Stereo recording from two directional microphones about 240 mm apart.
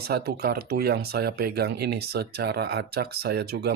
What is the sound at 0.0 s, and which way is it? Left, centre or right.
Speech, right.